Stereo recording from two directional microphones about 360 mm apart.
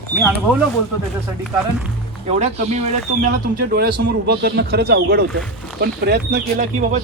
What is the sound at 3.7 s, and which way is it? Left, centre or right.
Speech, right.